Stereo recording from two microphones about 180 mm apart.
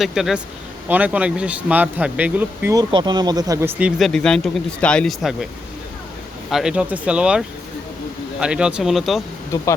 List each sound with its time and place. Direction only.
0.0 s speech: centre (ahead or behind)
2.9 s speech: 25° right (ahead or behind)
3.8 s speech: 5° right (ahead or behind)
6.5 s speech: 5° right (ahead or behind)